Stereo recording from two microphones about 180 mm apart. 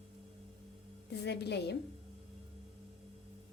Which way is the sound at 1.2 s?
70° left (ahead or behind).